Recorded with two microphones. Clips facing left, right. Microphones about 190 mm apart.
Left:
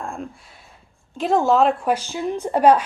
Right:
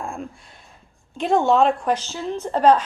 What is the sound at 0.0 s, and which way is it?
Speech, centre (ahead or behind).